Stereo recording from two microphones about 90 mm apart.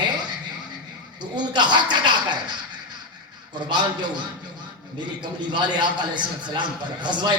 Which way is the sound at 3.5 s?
55° right (ahead or behind).